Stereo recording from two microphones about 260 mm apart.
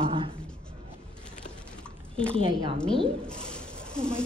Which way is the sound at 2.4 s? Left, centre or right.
Centre.